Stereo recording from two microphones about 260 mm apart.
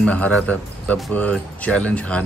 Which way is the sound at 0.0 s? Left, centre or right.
Centre.